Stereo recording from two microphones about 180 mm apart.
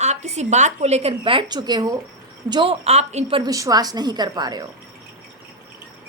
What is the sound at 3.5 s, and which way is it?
A woman's voice, 20° right (ahead or behind).